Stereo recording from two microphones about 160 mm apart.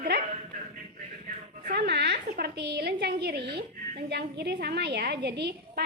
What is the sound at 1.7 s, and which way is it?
Speech, 90° right.